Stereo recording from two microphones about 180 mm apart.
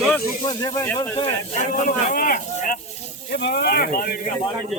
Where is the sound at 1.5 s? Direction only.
45° left (ahead or behind).